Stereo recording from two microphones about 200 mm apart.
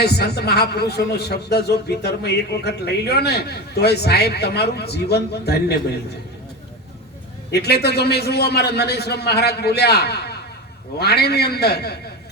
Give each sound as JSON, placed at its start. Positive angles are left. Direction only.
{"t": 0.0, "sound": "a man's voice", "side_deg": 55}
{"t": 7.5, "sound": "a man's voice", "side_deg": 55}